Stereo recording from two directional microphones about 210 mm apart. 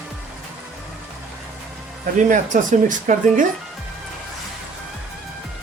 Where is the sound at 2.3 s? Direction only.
35° right (ahead or behind).